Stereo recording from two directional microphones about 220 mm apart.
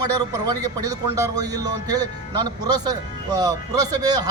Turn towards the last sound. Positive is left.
turn(degrees=-15)  # may be behind; listen again after turning